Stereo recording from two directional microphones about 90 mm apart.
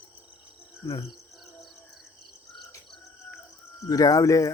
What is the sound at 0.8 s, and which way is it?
Cricket, 40° left (ahead or behind).